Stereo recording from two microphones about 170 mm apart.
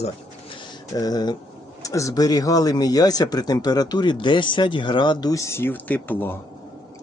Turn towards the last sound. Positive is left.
turn(degrees=10)  # may be behind; listen again after turning